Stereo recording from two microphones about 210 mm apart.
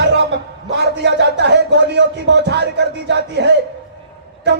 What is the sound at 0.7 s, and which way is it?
Speech, 55° right (ahead or behind).